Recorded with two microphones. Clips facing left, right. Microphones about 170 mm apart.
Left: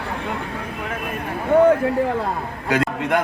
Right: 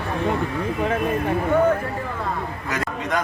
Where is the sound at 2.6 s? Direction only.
60° left (ahead or behind).